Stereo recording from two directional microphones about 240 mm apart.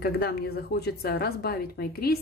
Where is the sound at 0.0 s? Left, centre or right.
Left.